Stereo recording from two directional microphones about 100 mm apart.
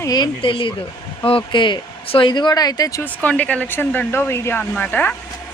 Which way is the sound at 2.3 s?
45° left (ahead or behind).